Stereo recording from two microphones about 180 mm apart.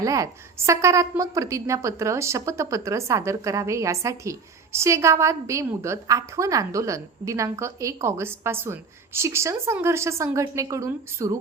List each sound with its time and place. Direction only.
0.0 s a woman's voice: 20° right (ahead or behind)